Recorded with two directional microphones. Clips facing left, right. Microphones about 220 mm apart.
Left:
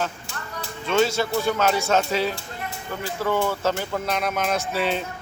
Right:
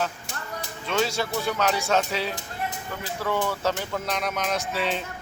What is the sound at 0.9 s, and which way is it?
Speech, centre (ahead or behind).